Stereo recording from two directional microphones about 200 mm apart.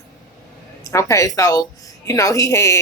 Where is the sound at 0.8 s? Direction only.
15° left (ahead or behind).